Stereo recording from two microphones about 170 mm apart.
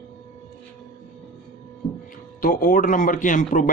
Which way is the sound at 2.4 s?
55° left (ahead or behind).